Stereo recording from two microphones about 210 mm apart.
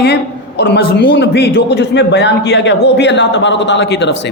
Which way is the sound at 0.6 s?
50° left (ahead or behind).